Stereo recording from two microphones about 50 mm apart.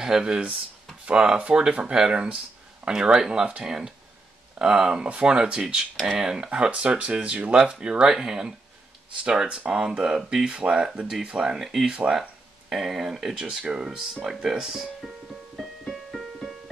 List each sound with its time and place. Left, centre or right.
0.0 s speech: centre
15.0 s music: centre